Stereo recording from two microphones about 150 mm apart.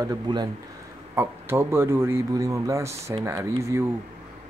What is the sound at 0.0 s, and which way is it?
Speech, 25° right (ahead or behind).